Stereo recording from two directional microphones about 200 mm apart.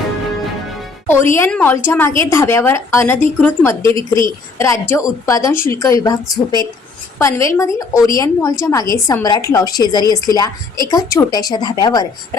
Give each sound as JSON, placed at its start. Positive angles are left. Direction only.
{"t": 1.0, "sound": "a woman's voice", "side_deg": 10}
{"t": 3.8, "sound": "a woman's voice", "side_deg": -25}
{"t": 4.5, "sound": "a woman's voice", "side_deg": 15}
{"t": 7.2, "sound": "a woman's voice", "side_deg": 15}